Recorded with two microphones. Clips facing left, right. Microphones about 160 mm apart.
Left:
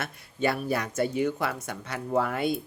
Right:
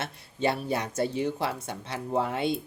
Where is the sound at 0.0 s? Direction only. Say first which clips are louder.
Even; 25° right (ahead or behind).